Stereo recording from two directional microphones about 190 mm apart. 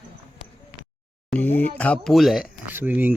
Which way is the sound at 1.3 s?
10° left (ahead or behind).